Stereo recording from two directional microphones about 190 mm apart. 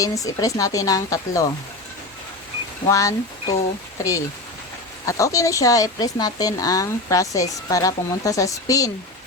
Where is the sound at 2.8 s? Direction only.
15° left (ahead or behind).